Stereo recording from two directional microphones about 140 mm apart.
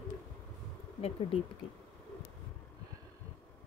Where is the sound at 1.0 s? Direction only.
45° left (ahead or behind).